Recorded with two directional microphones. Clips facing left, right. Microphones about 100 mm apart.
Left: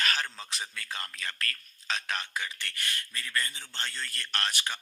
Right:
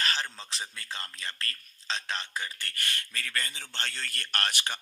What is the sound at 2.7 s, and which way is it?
A man's voice, 60° right (ahead or behind).